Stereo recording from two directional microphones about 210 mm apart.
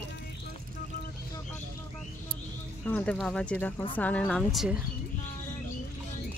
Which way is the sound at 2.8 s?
5° left (ahead or behind).